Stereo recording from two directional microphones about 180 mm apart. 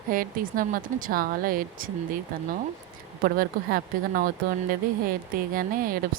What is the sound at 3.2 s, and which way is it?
Speech, 60° right (ahead or behind).